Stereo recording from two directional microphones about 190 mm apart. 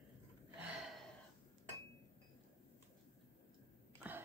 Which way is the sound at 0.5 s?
5° right (ahead or behind).